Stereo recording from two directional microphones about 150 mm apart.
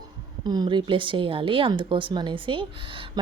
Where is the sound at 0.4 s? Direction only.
25° right (ahead or behind).